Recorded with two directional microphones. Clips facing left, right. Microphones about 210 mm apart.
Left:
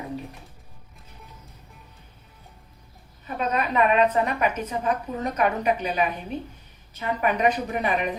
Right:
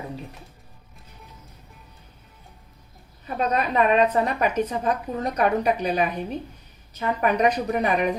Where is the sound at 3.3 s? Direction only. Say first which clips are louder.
Right 1 dB; 35° right (ahead or behind).